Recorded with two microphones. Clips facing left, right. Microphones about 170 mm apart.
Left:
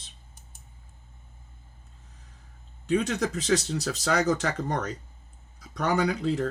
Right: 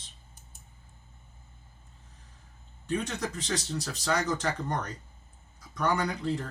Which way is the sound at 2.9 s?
75° left (ahead or behind).